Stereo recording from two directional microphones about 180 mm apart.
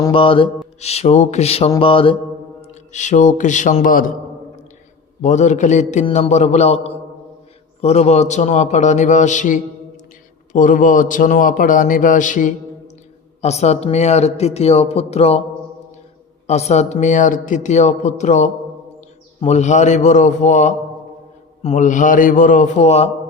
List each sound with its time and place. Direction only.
0.1 s speech: 30° left (ahead or behind)
1.8 s mantra: 30° left (ahead or behind)
2.6 s a man's voice: 40° left (ahead or behind)
5.2 s a man's voice: 40° left (ahead or behind)
16.5 s a man's voice: 40° left (ahead or behind)